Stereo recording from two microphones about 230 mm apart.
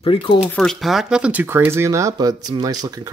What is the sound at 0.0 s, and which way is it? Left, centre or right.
Speech, left.